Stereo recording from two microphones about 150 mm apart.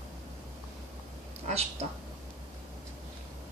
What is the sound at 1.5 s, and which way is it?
Speech, 45° right (ahead or behind).